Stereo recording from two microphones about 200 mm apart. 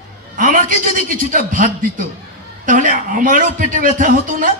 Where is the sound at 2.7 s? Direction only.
45° right (ahead or behind).